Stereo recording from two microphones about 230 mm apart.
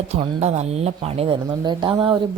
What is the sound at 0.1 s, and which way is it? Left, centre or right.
Speech, right.